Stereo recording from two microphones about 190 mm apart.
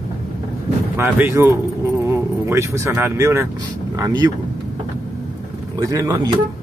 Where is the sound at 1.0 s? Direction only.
10° right (ahead or behind).